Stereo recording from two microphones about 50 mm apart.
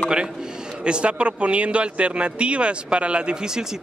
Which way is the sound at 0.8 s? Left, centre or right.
Right.